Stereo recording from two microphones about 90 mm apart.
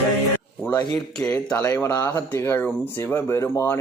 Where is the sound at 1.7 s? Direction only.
25° left (ahead or behind).